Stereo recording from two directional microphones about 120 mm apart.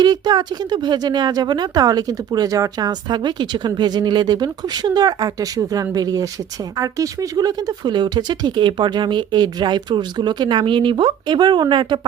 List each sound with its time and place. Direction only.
0.0 s speech: 35° right (ahead or behind)